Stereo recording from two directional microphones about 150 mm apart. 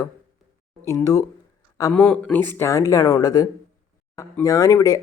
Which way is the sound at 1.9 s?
5° left (ahead or behind).